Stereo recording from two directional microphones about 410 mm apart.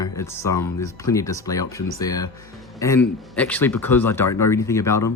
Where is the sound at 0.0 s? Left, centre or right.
Centre.